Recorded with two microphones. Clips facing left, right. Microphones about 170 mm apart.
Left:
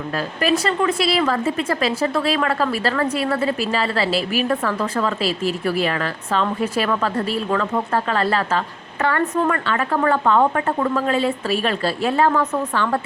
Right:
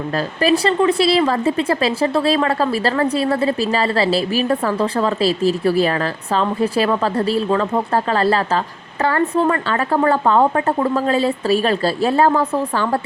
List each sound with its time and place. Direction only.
0.4 s a woman's voice: 30° right (ahead or behind)